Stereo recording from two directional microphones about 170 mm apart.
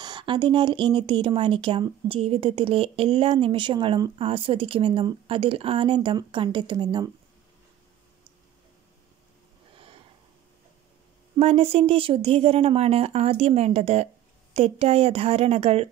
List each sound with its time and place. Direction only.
0.0 s speech: 25° right (ahead or behind)
11.3 s speech: 35° right (ahead or behind)